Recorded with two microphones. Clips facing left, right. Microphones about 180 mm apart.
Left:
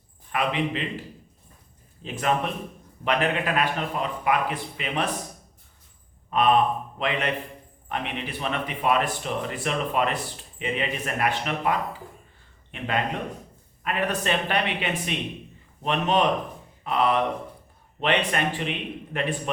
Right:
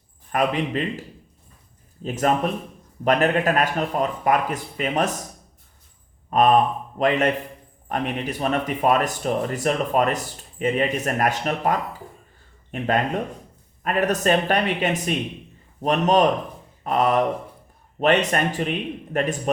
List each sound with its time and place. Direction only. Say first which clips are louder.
0.3 s speech: right 3 dB; 45° right (ahead or behind)
2.0 s speech: right 4 dB; 40° right (ahead or behind)
6.3 s a man's voice: right 3 dB; 45° right (ahead or behind)